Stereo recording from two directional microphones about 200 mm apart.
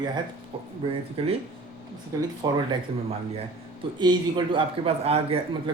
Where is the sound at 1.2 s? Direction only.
30° right (ahead or behind).